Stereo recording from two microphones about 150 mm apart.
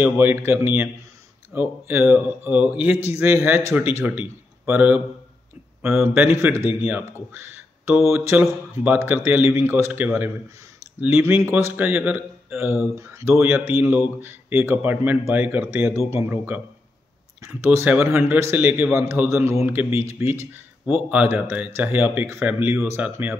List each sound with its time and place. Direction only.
0.0 s a man's voice: 15° right (ahead or behind)